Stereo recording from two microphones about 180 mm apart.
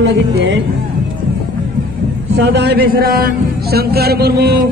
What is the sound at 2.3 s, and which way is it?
A man's voice, 70° right (ahead or behind).